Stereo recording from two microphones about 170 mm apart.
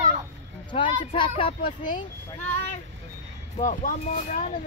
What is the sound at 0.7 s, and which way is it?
Speech, 30° left (ahead or behind).